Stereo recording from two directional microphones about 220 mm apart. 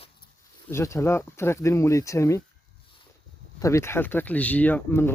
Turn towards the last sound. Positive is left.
turn(degrees=10)  # may be behind; listen again after turning